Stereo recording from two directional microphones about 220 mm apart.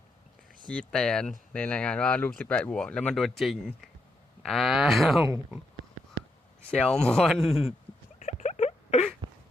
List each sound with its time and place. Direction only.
0.7 s speech: 5° left (ahead or behind)
6.7 s speech: 5° left (ahead or behind)
8.2 s a sound: 30° left (ahead or behind)